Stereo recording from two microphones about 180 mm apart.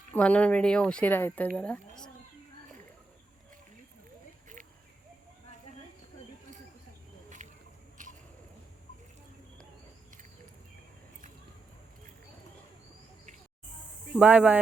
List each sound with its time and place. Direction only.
0.1 s speech: 10° left (ahead or behind)
7.4 s biting: 40° right (ahead or behind)
8.0 s a sound: 45° right (ahead or behind)
14.2 s speech: 10° right (ahead or behind)